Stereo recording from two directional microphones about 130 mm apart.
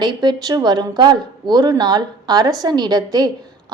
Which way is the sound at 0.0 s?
35° right (ahead or behind).